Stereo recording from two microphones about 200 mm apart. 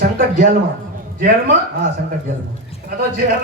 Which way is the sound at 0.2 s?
40° right (ahead or behind).